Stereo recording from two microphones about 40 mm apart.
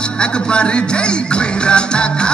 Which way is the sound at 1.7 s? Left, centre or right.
Left.